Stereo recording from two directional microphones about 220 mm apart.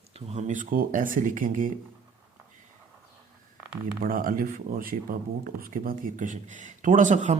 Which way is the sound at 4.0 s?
40° right (ahead or behind).